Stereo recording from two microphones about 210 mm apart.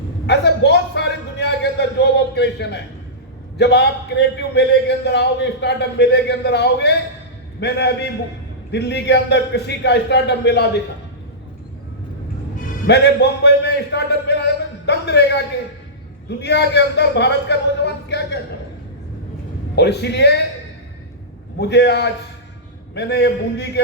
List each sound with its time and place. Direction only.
0.3 s a sound: 55° left (ahead or behind)
2.3 s a man's voice: 55° left (ahead or behind)
12.6 s a man's voice: 50° left (ahead or behind)
16.3 s a man's voice: 55° left (ahead or behind)
19.7 s a man's voice: 50° left (ahead or behind)
21.6 s a man's voice: 55° left (ahead or behind)